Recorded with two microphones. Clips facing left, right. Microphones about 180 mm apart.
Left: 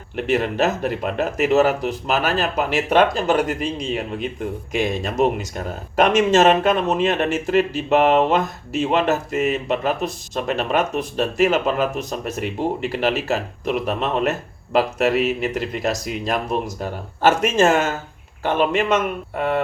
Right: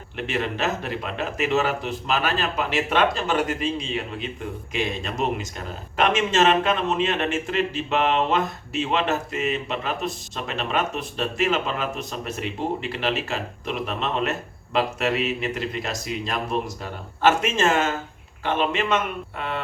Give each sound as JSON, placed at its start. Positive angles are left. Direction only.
{"t": 0.3, "sound": "speech", "side_deg": 40}